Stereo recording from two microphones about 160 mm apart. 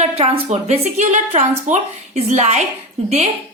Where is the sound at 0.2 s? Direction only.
40° right (ahead or behind).